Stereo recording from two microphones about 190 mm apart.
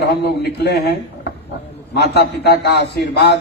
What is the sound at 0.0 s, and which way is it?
A man's voice, 60° left (ahead or behind).